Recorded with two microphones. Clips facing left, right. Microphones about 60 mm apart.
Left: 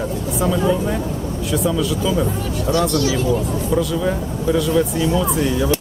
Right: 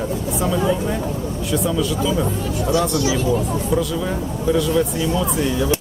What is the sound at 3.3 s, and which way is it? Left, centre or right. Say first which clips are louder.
Speech: left 1 dB; centre.